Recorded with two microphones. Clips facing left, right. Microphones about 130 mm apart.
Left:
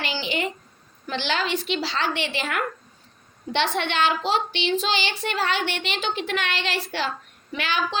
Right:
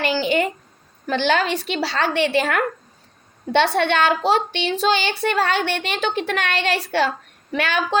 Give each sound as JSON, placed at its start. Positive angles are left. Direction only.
{"t": 0.0, "sound": "a sound", "side_deg": -50}
{"t": 1.0, "sound": "speech", "side_deg": -50}
{"t": 3.8, "sound": "speech", "side_deg": -50}